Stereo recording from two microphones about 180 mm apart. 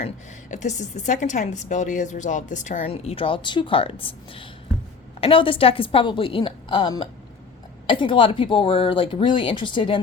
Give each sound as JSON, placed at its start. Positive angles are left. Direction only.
{"t": 0.5, "sound": "a woman's voice", "side_deg": 40}